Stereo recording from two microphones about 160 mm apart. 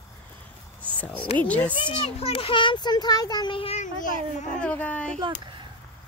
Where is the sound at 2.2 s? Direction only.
35° left (ahead or behind).